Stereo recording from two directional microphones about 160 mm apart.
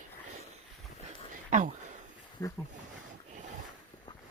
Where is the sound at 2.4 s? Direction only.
20° left (ahead or behind).